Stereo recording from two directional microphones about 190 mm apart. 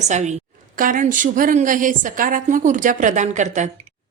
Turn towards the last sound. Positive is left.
turn(degrees=-40)  # may be behind; listen again after turning